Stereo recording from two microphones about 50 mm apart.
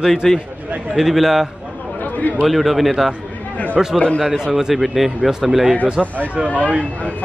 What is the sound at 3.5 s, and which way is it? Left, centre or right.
Speech, left.